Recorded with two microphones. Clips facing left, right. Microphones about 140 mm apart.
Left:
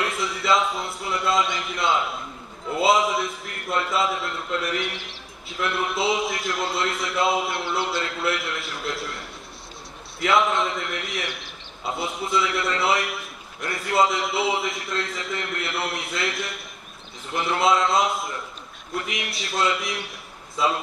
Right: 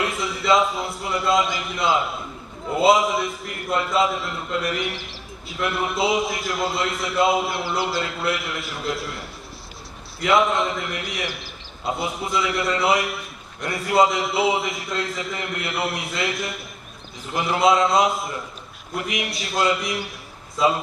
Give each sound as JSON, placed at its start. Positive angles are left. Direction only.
{"t": 0.0, "sound": "a man's voice", "side_deg": 0}
{"t": 10.2, "sound": "a man's voice", "side_deg": 0}